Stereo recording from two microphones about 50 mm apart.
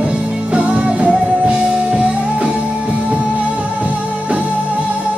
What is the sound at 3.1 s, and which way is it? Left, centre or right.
Music, right.